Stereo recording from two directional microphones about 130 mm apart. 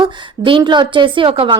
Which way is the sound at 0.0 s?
40° right (ahead or behind).